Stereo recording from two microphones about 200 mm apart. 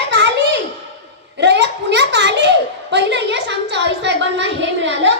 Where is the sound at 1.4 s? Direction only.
60° right (ahead or behind).